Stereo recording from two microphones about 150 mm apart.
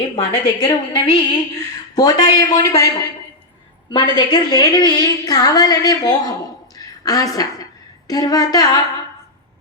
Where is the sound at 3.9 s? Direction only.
30° left (ahead or behind).